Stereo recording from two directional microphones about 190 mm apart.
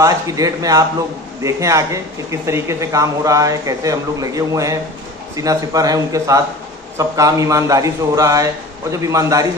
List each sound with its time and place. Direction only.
0.0 s a man's voice: 20° right (ahead or behind)